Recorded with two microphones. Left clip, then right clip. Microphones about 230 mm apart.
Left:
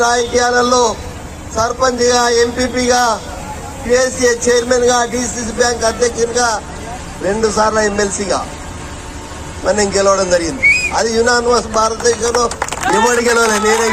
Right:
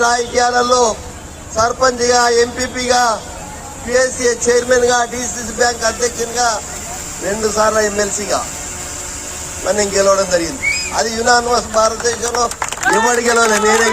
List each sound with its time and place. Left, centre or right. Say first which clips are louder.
0.0 s a man's voice: left 1 dB; left
9.6 s a man's voice: left 1 dB; left